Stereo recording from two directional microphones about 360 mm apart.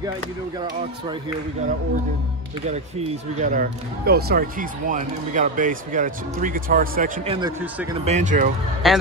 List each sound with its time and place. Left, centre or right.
2.7 s speech: centre
8.8 s a man's voice: centre